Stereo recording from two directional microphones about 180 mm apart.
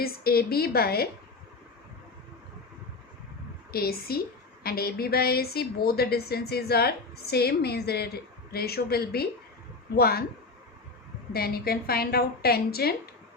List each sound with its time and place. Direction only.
0.0 s a woman's voice: 60° left (ahead or behind)
3.7 s a woman's voice: 60° left (ahead or behind)
11.3 s a woman's voice: 60° left (ahead or behind)